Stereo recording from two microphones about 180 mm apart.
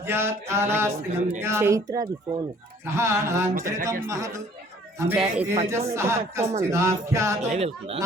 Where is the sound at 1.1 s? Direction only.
40° right (ahead or behind).